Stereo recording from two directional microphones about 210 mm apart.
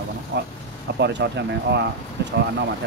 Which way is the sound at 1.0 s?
55° right (ahead or behind).